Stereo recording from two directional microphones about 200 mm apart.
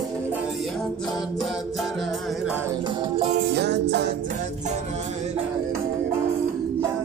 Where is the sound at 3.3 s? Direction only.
55° right (ahead or behind).